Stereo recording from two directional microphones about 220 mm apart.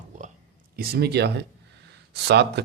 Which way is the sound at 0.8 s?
45° right (ahead or behind).